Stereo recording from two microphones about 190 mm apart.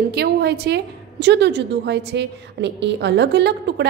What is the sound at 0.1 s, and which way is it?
A woman's voice, 60° right (ahead or behind).